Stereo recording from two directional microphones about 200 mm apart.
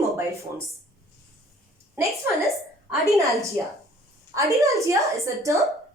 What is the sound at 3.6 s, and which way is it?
A woman's voice, 15° right (ahead or behind).